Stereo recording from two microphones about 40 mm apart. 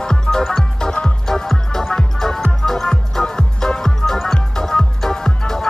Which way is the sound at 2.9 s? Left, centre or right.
Centre.